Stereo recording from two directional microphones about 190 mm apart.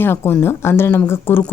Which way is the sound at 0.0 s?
10° left (ahead or behind).